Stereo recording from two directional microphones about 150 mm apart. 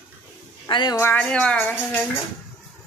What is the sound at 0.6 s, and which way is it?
Speech, 30° left (ahead or behind).